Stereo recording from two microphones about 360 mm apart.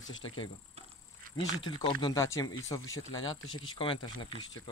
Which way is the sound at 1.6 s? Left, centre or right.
Centre.